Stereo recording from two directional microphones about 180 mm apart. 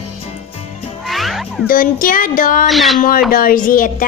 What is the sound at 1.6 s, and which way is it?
A woman's voice, 50° left (ahead or behind).